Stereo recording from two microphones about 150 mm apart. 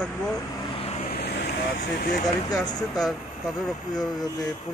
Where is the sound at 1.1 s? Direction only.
90° left.